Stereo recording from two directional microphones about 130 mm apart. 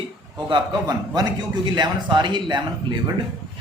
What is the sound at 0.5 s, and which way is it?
A man's voice, 30° right (ahead or behind).